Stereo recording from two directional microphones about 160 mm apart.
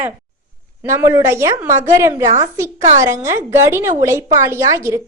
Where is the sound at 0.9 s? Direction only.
15° right (ahead or behind).